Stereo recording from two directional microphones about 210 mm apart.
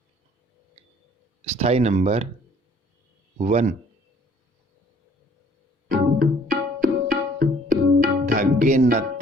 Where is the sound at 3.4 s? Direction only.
30° right (ahead or behind).